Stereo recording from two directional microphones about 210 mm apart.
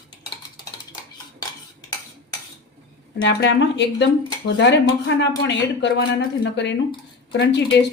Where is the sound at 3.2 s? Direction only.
60° left (ahead or behind).